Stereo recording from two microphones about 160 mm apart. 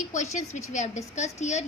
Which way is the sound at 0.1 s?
50° left (ahead or behind).